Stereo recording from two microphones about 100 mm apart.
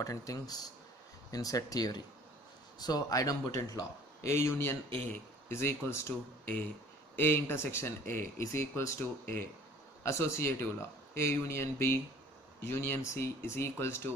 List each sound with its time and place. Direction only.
0.0 s speech: 35° left (ahead or behind)
7.2 s speech: 25° left (ahead or behind)